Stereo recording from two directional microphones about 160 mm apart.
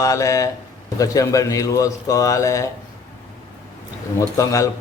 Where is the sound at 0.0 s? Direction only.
20° left (ahead or behind).